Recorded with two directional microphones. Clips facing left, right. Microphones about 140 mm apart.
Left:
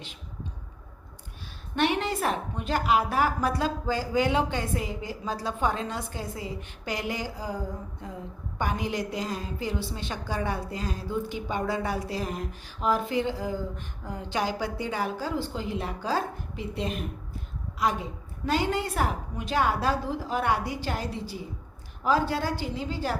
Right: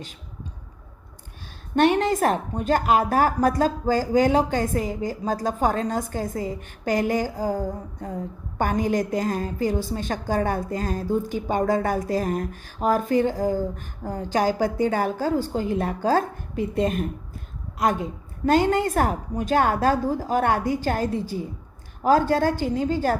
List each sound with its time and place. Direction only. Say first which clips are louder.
1.7 s a woman's voice: right 7 dB; 45° right (ahead or behind)